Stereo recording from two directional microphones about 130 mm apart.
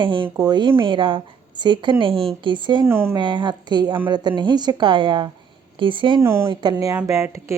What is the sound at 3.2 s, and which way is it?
Speech, 35° right (ahead or behind).